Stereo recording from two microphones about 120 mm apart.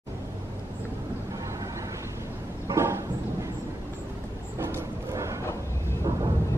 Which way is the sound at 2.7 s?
25° right (ahead or behind).